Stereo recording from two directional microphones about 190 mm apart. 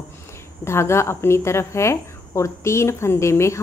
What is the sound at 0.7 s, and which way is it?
A woman's voice, 15° left (ahead or behind).